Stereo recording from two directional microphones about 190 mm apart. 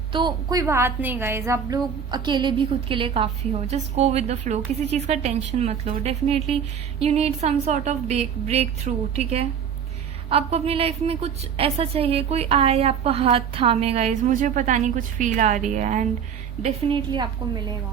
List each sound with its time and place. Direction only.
0.1 s a woman's voice: 25° right (ahead or behind); by 16.0 s 40° right (ahead or behind)
16.6 s a woman's voice: 25° right (ahead or behind)